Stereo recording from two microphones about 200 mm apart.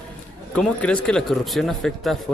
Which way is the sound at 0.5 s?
5° left (ahead or behind).